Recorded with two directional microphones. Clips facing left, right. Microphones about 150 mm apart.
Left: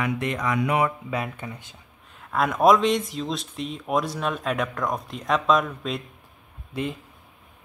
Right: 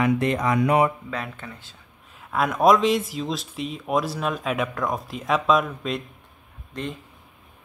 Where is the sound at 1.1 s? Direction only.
15° left (ahead or behind).